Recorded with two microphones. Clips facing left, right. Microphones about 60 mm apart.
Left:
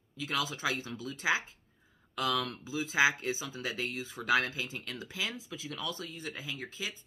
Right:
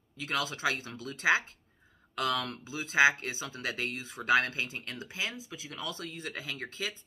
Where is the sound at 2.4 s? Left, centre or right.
Right.